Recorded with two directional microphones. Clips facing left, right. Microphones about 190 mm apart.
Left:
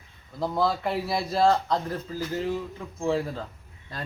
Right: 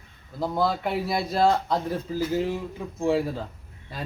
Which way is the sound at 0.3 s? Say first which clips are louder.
Right 1 dB; centre (ahead or behind).